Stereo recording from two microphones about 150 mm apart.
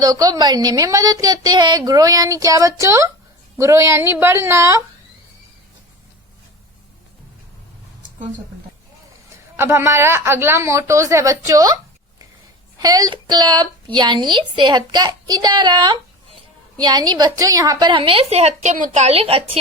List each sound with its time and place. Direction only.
0.0 s a woman's voice: 25° right (ahead or behind)
9.6 s a woman's voice: 15° right (ahead or behind)
12.8 s a woman's voice: 25° right (ahead or behind)